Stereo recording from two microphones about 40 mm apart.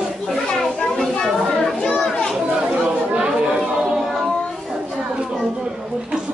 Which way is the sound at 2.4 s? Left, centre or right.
Right.